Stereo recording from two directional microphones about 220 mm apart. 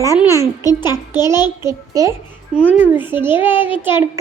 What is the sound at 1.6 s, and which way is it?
A child's voice, 15° right (ahead or behind).